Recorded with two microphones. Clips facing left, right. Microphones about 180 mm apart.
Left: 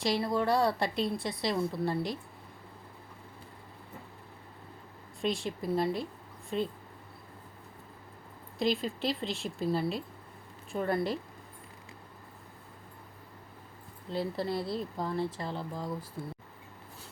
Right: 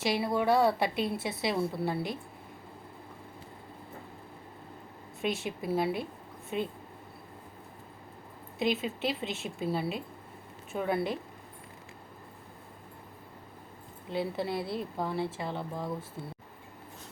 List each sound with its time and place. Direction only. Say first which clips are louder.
0.0 s a woman's voice: right 1 dB; 5° right (ahead or behind)
5.2 s a woman's voice: even; 5° right (ahead or behind)
8.5 s a woman's voice: even; centre (ahead or behind)
14.1 s a woman's voice: even; centre (ahead or behind)
16.2 s speech: left 2 dB; 20° right (ahead or behind)